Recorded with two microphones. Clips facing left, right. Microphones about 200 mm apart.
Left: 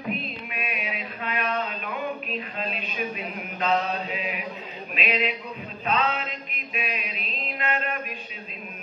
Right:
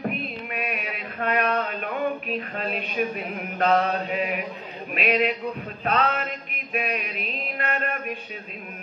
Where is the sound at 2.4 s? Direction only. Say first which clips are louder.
Right 3 dB; 60° right (ahead or behind).